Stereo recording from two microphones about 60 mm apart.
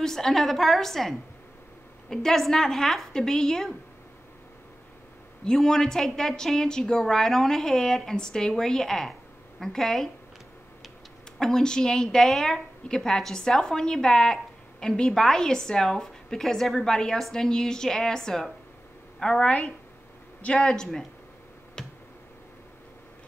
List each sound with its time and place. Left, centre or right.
0.0 s a woman's voice: centre
5.4 s a woman's voice: centre
11.3 s a woman's voice: centre
21.8 s tick-tock: centre